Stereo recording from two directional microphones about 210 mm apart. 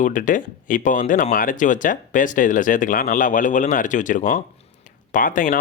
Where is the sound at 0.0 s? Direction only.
40° left (ahead or behind).